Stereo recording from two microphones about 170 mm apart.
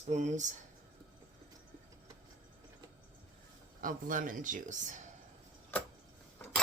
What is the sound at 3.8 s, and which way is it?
Speech, 50° right (ahead or behind).